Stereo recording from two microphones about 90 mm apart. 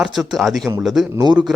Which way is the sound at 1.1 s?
50° right (ahead or behind).